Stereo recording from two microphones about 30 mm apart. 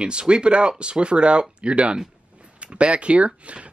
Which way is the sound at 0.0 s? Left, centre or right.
Right.